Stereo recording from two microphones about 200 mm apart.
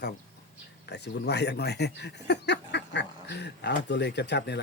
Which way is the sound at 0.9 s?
55° left (ahead or behind).